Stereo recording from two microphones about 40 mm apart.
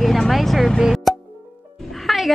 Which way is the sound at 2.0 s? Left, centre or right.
Centre.